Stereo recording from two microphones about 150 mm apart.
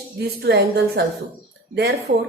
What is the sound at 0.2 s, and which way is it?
A woman's voice, 90° right.